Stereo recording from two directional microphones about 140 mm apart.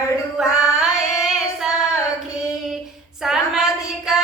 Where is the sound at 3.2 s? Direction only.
Centre (ahead or behind).